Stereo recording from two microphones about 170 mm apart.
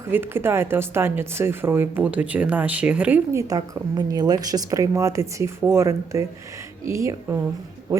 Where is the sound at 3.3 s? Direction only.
20° right (ahead or behind).